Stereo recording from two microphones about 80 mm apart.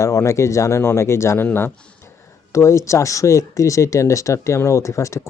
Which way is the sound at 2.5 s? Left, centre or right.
Left.